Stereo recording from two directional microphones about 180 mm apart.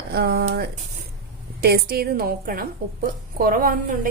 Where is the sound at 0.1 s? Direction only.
60° right (ahead or behind).